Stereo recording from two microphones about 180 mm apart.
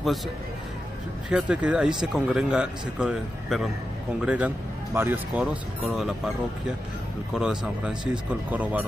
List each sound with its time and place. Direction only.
1.3 s speech: 5° right (ahead or behind)
7.3 s speech: 5° right (ahead or behind)